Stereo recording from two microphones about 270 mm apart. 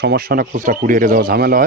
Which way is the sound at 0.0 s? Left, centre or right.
Right.